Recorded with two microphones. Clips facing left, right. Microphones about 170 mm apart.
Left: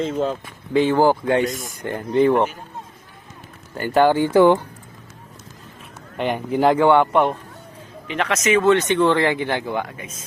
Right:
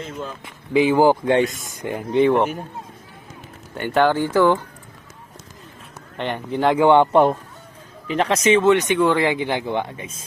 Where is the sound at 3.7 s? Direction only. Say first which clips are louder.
Left 2 dB; centre (ahead or behind).